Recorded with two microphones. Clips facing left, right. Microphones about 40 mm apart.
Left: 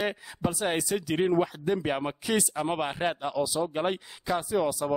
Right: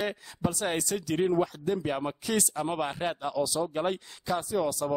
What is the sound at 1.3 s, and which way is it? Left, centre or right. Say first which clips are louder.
A man's voice: left 1 dB; left.